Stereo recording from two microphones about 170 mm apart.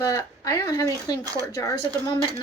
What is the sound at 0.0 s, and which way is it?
Speech, 20° left (ahead or behind).